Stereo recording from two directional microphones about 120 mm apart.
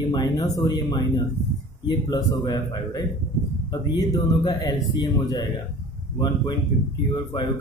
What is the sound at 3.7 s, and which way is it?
A man's voice, 35° left (ahead or behind).